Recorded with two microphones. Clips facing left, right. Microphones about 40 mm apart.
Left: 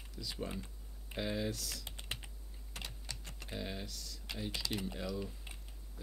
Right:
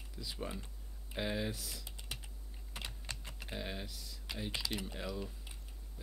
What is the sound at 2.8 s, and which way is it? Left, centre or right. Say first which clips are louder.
Typing: right 1 dB; centre.